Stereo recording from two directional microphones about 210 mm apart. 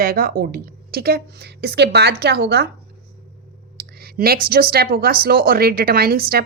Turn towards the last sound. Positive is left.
turn(degrees=-45)  # may be behind; listen again after turning